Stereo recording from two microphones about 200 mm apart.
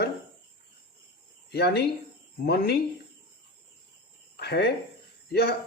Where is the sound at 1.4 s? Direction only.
55° left (ahead or behind).